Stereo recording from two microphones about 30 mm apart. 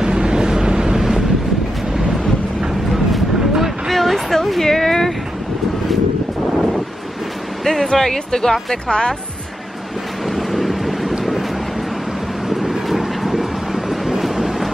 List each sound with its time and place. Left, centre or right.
0.0 s vehicle: right
3.1 s vehicle: centre
3.9 s a sound: centre
7.6 s music: centre
7.9 s speech: centre
8.8 s a woman's voice: left
10.3 s vehicle: centre
12.4 s vehicle: centre
14.2 s train: centre